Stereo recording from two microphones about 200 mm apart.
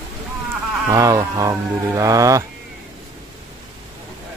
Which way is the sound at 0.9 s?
15° right (ahead or behind).